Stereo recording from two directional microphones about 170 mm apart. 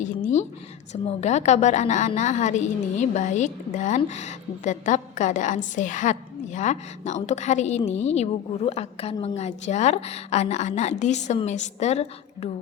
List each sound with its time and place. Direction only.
0.0 s a woman's voice: 45° left (ahead or behind)